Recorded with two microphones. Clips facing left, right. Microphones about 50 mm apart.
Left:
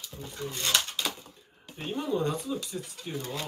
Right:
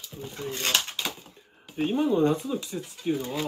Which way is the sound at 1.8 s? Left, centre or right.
Right.